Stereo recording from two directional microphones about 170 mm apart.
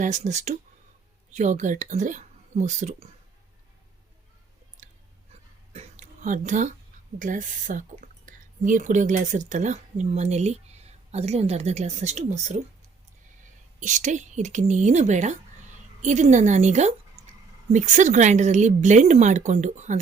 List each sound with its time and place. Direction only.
0.0 s speech: 45° right (ahead or behind)
5.7 s a sound: 40° right (ahead or behind)
7.2 s speech: 50° right (ahead or behind)
13.7 s speech: 45° right (ahead or behind)
17.2 s a sound: 40° right (ahead or behind)
17.7 s speech: 45° right (ahead or behind)